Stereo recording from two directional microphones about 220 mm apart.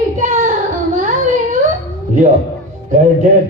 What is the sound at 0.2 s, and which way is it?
Child singing, 35° right (ahead or behind).